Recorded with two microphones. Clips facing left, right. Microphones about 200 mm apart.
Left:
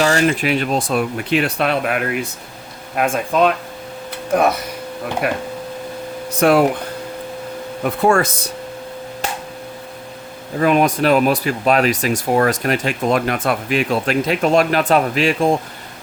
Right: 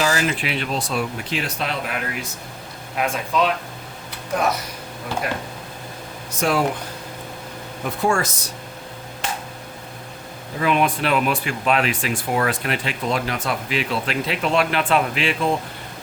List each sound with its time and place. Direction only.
0.0 s speech: 50° left (ahead or behind)
5.2 s speech: 65° left (ahead or behind)
7.9 s speech: 60° left (ahead or behind)
10.6 s speech: 45° left (ahead or behind)